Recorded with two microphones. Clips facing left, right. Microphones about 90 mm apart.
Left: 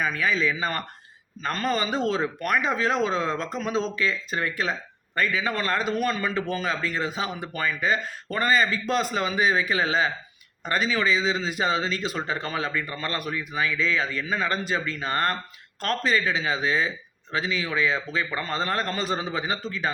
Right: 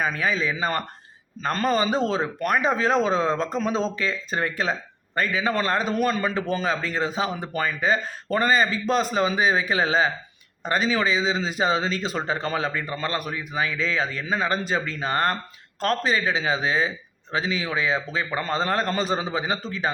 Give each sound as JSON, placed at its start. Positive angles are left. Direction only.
{"t": 0.0, "sound": "speech", "side_deg": -30}